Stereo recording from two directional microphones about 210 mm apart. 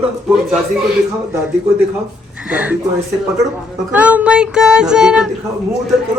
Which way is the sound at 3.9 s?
5° right (ahead or behind).